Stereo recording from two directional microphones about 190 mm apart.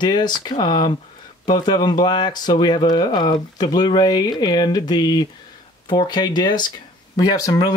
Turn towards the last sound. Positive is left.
turn(degrees=20)  # may be behind; listen again after turning